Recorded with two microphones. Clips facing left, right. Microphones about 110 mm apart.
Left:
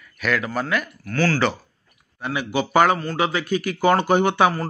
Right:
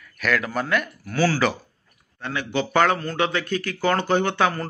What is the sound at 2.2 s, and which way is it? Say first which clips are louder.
A man's voice: left 2 dB; 10° left (ahead or behind).